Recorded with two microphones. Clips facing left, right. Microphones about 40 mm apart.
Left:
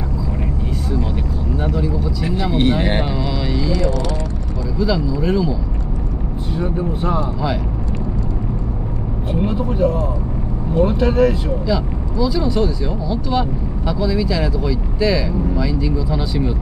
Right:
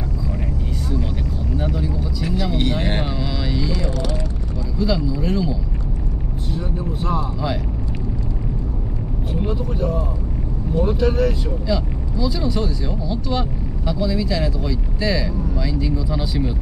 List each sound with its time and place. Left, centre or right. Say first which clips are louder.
1.7 s vehicle: left 4 dB; centre
2.2 s speech: left 4 dB; centre
6.5 s speech: left 6 dB; centre
9.3 s speech: left 4 dB; centre
11.6 s speech: left 3 dB; centre